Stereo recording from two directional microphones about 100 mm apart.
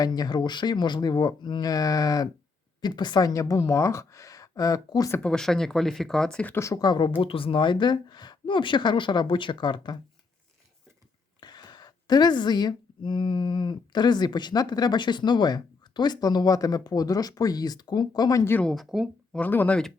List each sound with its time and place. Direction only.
0.0 s a woman's voice: 40° left (ahead or behind)
5.2 s speech: 5° left (ahead or behind)
6.6 s a woman's voice: 35° left (ahead or behind)
7.2 s a woman's voice: 65° left (ahead or behind)
11.3 s a woman's voice: 45° left (ahead or behind)
18.6 s speech: centre (ahead or behind)
19.3 s speech: 15° left (ahead or behind)